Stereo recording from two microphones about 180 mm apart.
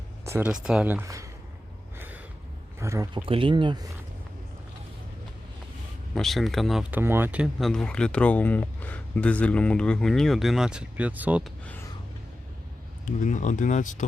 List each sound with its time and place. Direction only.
0.3 s speech: 10° right (ahead or behind)
2.0 s a sound: 10° right (ahead or behind)
2.7 s speech: 15° right (ahead or behind)
3.2 s speech: 30° right (ahead or behind)
6.1 s speech: centre (ahead or behind)
7.0 s speech: 10° right (ahead or behind)
13.1 s speech: 45° left (ahead or behind)